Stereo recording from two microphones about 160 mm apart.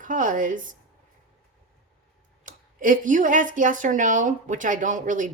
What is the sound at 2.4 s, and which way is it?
Speech, 55° right (ahead or behind).